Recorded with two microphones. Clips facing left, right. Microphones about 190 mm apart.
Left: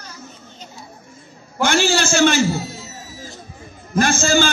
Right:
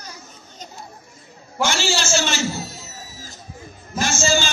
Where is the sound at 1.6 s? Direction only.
55° left (ahead or behind).